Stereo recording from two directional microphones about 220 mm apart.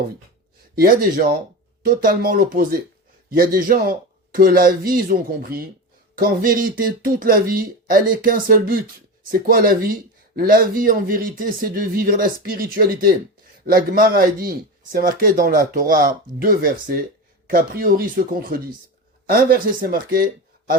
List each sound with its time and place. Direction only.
0.8 s speech: 40° right (ahead or behind)